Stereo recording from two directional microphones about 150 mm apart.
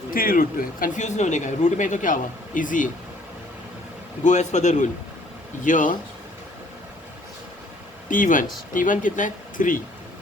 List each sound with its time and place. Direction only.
0.1 s speech: 70° left (ahead or behind)
4.2 s a man's voice: 50° left (ahead or behind)
8.1 s speech: 60° left (ahead or behind)